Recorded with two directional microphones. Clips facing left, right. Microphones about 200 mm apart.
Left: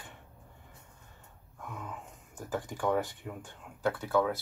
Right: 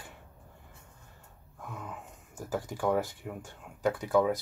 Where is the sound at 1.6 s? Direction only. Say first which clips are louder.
Even; centre (ahead or behind).